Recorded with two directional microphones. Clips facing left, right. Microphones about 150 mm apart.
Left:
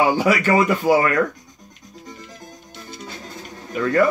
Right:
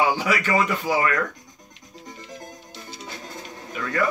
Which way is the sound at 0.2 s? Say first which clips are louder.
Left 5 dB; 45° left (ahead or behind).